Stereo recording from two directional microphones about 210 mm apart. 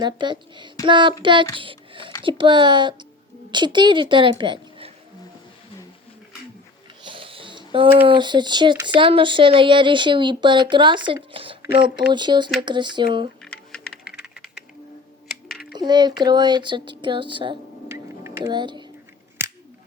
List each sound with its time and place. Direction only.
0.0 s a woman's voice: 20° right (ahead or behind)
7.0 s a sound: 25° right (ahead or behind)
8.0 s speech: 20° right (ahead or behind)
13.4 s typing: 5° left (ahead or behind)
14.1 s a sound: 5° right (ahead or behind)
15.4 s typing: 50° left (ahead or behind)
15.8 s speech: 20° right (ahead or behind)
17.8 s music: 15° right (ahead or behind)